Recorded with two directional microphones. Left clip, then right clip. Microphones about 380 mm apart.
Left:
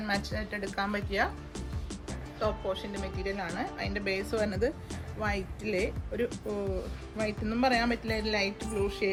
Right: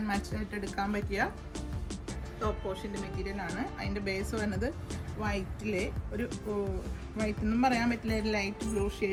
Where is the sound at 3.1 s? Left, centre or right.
Centre.